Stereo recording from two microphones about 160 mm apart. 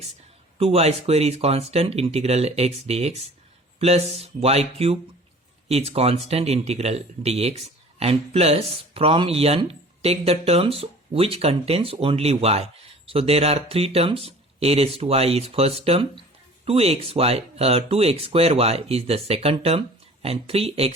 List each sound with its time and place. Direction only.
0.6 s speech: 40° right (ahead or behind)